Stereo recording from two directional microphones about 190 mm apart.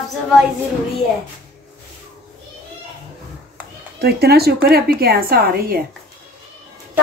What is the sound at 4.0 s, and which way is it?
A woman's voice, 55° right (ahead or behind).